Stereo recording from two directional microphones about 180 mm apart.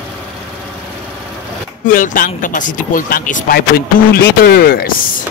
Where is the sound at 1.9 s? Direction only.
50° left (ahead or behind).